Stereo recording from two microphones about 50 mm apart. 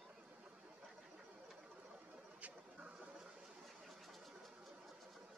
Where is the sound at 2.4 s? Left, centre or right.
Right.